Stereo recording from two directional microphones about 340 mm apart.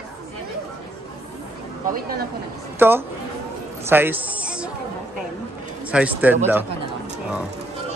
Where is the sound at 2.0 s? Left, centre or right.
Right.